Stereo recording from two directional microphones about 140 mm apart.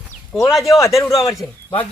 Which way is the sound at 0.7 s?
20° left (ahead or behind).